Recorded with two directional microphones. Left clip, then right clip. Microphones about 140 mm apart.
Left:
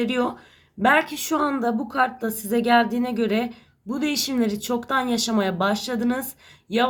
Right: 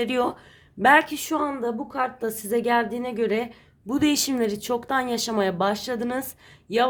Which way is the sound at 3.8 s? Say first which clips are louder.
Right 2 dB; 45° right (ahead or behind).